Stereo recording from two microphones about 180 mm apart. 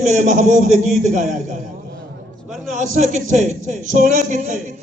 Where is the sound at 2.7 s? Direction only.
40° right (ahead or behind).